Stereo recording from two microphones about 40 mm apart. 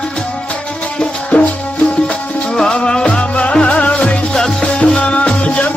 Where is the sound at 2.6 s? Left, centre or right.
Left.